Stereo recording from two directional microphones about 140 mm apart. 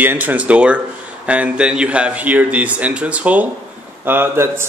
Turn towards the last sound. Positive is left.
turn(degrees=-15)  # may be behind; listen again after turning